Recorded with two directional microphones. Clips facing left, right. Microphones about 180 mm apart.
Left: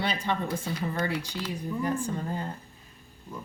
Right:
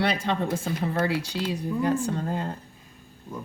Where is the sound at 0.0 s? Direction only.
80° right.